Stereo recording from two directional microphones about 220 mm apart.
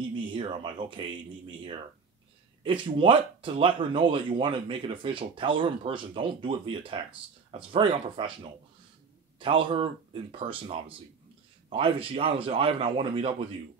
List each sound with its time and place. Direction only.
0.1 s speech: 20° right (ahead or behind)